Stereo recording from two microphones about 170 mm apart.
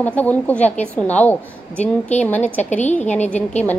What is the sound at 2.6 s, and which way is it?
Speech, 45° left (ahead or behind).